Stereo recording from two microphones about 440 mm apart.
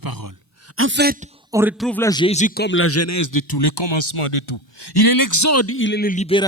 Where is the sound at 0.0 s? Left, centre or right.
Right.